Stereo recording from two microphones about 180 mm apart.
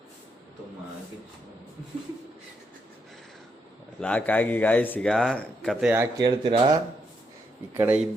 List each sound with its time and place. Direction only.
4.0 s speech: 10° left (ahead or behind)
5.9 s speech: 15° right (ahead or behind)
7.7 s speech: 10° right (ahead or behind)